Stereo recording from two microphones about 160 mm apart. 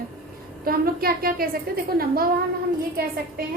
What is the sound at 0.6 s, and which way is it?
A woman's voice, 70° right (ahead or behind).